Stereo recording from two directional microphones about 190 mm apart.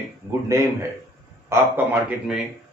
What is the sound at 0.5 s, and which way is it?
A man's voice, 15° right (ahead or behind).